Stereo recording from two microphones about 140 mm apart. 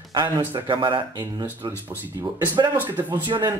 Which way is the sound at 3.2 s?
30° right (ahead or behind).